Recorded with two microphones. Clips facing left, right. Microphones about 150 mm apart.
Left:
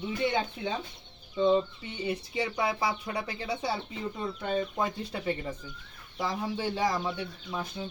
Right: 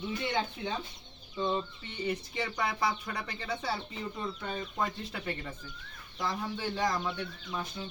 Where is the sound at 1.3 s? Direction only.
20° left (ahead or behind).